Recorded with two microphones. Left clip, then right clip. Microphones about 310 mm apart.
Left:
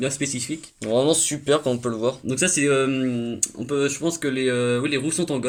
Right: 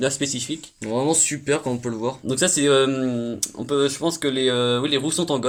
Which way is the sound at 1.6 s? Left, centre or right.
Left.